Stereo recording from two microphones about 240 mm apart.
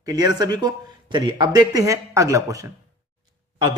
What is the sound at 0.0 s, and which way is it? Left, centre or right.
A man's voice, centre.